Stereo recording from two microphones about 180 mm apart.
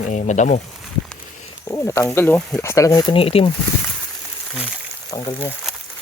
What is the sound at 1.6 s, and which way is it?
Speech, 15° left (ahead or behind).